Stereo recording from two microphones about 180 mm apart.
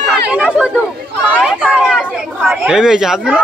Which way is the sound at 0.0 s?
5° right (ahead or behind).